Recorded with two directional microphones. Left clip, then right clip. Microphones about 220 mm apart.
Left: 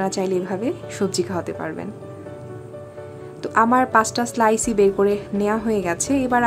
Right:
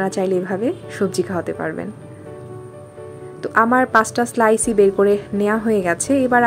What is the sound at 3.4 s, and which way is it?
A woman's voice, 5° right (ahead or behind).